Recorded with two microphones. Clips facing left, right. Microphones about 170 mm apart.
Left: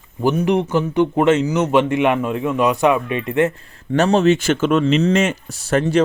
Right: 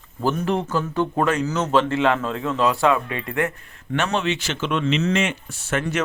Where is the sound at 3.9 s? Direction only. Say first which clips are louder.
Left 9 dB; 40° left (ahead or behind).